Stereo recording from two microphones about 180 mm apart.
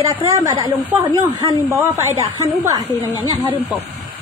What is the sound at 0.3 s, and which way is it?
Speech, 20° right (ahead or behind).